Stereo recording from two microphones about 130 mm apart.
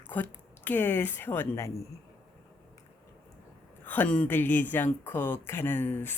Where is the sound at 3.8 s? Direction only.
15° left (ahead or behind).